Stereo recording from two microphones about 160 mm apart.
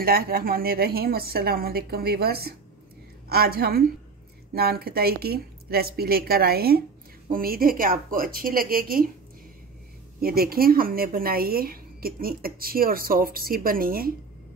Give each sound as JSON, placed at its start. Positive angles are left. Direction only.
{"t": 0.0, "sound": "a woman's voice", "side_deg": -70}
{"t": 10.2, "sound": "a woman's voice", "side_deg": -70}